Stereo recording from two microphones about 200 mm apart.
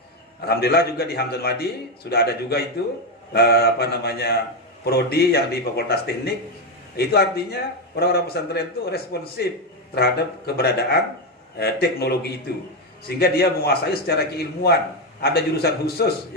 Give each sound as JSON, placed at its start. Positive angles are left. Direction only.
{"t": 0.4, "sound": "a man's voice", "side_deg": 50}